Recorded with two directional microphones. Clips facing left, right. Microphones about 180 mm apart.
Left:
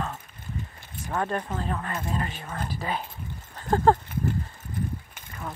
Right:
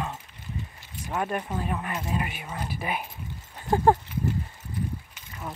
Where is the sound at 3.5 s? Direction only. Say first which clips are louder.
Even; 15° right (ahead or behind).